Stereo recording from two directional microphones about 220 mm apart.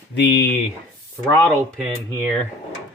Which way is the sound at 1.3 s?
10° left (ahead or behind).